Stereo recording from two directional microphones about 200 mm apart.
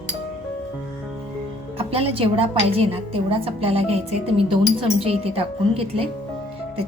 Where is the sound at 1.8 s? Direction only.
30° right (ahead or behind).